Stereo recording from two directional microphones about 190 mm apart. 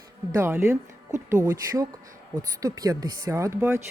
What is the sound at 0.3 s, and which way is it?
Speech, 15° right (ahead or behind).